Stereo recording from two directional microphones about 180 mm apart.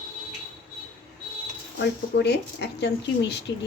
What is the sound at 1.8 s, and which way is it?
Speech, 70° left (ahead or behind).